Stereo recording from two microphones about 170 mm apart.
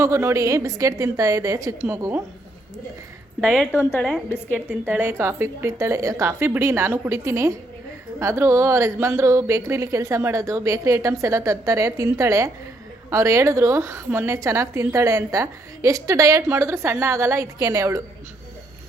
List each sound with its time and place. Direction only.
0.0 s a woman's voice: 15° right (ahead or behind)
3.4 s a woman's voice: 5° left (ahead or behind)
4.5 s a woman's voice: 10° right (ahead or behind)